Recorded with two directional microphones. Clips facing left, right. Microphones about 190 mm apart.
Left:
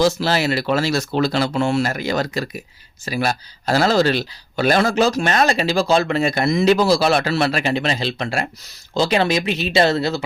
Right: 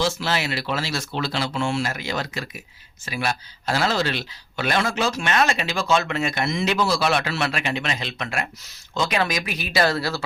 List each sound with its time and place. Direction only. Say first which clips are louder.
0.0 s speech: left 6 dB; 40° left (ahead or behind); by 10.2 s 20° left (ahead or behind)